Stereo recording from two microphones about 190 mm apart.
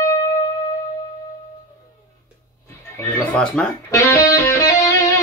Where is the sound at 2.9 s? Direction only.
5° left (ahead or behind).